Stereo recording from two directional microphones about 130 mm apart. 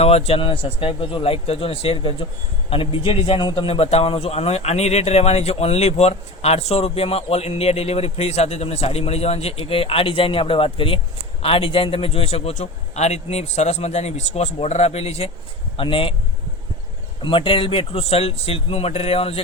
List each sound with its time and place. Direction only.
0.0 s a man's voice: 50° left (ahead or behind)
17.2 s a man's voice: 45° left (ahead or behind)